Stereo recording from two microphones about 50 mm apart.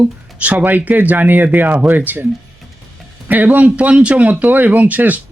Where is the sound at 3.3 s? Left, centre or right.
Right.